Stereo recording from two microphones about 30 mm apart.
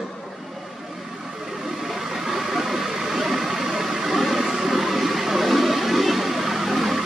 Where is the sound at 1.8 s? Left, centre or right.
Centre.